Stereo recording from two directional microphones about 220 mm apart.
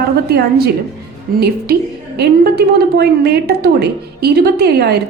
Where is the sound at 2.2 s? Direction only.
45° right (ahead or behind).